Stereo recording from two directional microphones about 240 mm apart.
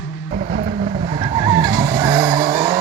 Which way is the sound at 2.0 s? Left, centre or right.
Centre.